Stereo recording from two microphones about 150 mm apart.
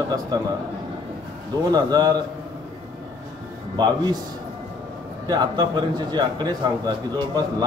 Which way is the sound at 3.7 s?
30° right (ahead or behind).